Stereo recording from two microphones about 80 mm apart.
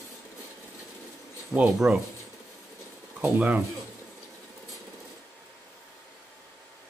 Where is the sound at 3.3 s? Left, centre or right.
Centre.